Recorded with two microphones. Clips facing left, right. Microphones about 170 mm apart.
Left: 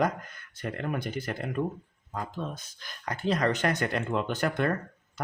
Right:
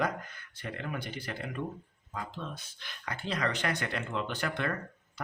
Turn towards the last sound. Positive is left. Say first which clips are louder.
# left 6 dB
turn(degrees=45)  # may be behind; listen again after turning